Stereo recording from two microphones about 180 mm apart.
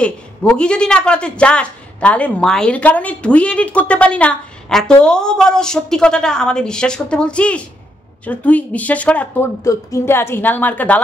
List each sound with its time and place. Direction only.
0.0 s a woman's voice: 5° left (ahead or behind)